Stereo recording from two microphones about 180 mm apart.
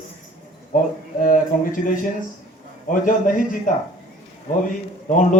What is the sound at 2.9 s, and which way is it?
Speech, 50° left (ahead or behind).